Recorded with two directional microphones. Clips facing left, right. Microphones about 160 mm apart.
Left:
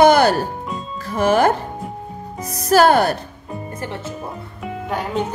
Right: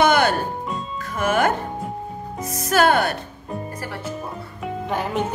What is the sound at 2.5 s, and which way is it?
Speech, 35° left (ahead or behind).